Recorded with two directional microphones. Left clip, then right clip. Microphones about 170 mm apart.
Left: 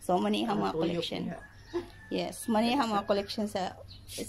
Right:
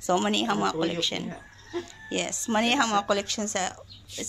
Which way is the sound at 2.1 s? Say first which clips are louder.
Right 3 dB; 5° right (ahead or behind).